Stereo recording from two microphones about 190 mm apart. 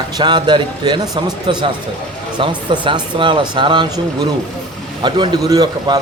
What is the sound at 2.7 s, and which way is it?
A man's voice, 25° right (ahead or behind).